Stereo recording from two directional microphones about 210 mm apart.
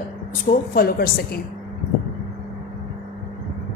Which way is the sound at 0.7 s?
45° left (ahead or behind).